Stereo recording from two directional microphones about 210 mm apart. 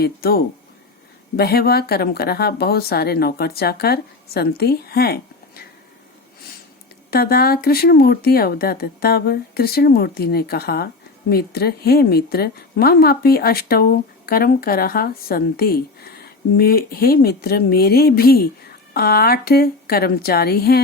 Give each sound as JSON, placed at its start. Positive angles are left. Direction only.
{"t": 0.0, "sound": "a woman's voice", "side_deg": 45}
{"t": 7.1, "sound": "a woman's voice", "side_deg": 45}